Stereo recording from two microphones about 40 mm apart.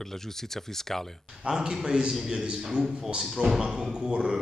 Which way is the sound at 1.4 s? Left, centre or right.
Centre.